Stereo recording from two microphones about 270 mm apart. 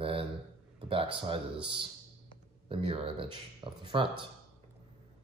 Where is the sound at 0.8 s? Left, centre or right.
Centre.